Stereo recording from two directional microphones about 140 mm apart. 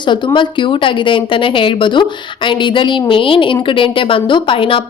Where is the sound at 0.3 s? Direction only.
40° left (ahead or behind).